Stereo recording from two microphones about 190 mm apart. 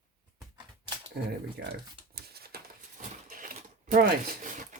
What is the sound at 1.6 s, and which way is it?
Speech, 60° right (ahead or behind).